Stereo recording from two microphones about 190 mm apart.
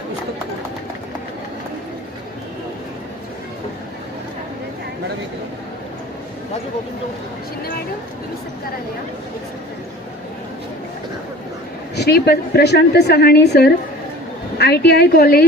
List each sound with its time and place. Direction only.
11.9 s a woman's voice: 60° left (ahead or behind)